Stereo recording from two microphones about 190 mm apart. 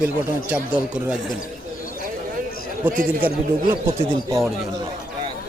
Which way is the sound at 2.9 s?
50° right (ahead or behind).